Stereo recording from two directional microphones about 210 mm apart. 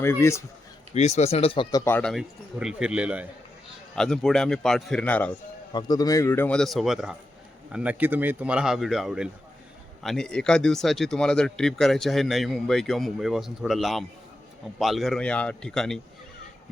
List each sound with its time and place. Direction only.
0.0 s a man's voice: 10° left (ahead or behind)
0.9 s speech: 30° left (ahead or behind)
1.8 s speech: 10° left (ahead or behind)
5.7 s a man's voice: 20° left (ahead or behind); by 16.0 s 5° left (ahead or behind)